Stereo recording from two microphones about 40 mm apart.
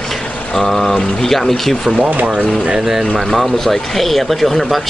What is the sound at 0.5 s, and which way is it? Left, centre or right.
Speech, centre.